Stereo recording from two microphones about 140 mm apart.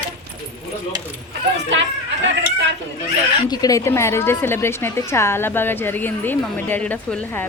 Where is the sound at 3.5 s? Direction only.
25° left (ahead or behind).